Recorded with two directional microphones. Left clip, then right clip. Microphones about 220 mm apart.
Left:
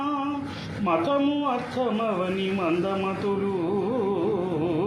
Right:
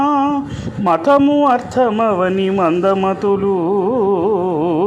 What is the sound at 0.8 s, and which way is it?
Speech, 25° right (ahead or behind).